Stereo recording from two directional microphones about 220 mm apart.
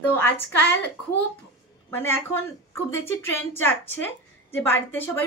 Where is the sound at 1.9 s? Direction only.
10° left (ahead or behind).